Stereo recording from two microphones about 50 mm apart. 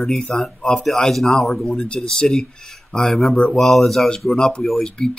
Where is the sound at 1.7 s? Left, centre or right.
Centre.